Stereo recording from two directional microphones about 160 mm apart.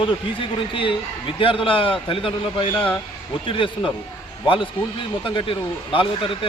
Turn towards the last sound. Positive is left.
turn(degrees=30)  # may be behind; listen again after turning